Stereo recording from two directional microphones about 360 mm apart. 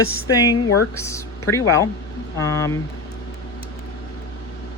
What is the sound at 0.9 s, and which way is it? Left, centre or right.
Speech, centre.